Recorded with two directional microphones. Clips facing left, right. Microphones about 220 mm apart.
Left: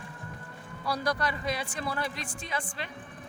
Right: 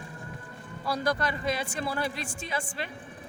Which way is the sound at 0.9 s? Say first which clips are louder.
Right 2 dB; 25° right (ahead or behind).